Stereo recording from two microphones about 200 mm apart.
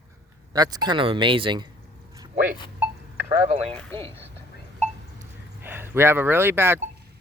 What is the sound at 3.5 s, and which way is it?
Speech, 30° right (ahead or behind).